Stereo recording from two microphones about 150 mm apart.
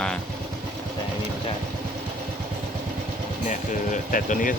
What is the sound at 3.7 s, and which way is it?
Speech, 60° left (ahead or behind).